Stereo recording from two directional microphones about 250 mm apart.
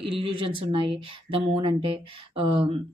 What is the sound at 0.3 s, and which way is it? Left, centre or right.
Speech, right.